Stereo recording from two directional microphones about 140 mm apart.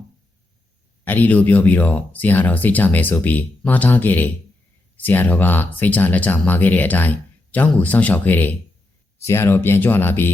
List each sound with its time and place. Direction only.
1.0 s speech: 15° left (ahead or behind)